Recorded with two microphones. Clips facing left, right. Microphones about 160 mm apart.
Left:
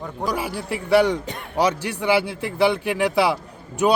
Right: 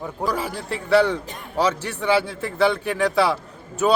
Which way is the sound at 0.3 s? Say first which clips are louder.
Left 1 dB; 10° left (ahead or behind).